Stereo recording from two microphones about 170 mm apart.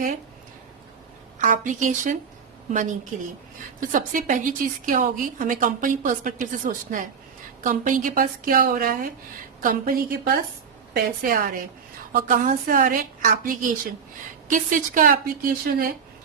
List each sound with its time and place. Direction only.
1.4 s a woman's voice: 50° right (ahead or behind)